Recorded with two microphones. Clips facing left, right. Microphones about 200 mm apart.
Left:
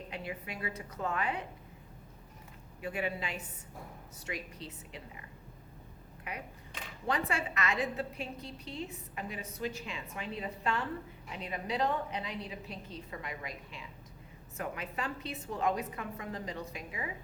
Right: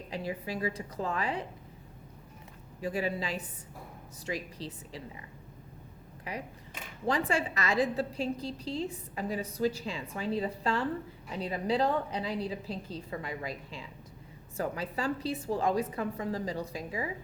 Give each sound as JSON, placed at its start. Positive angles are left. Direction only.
{"t": 0.3, "sound": "a woman's voice", "side_deg": -35}
{"t": 2.8, "sound": "a woman's voice", "side_deg": -35}
{"t": 7.1, "sound": "a woman's voice", "side_deg": -30}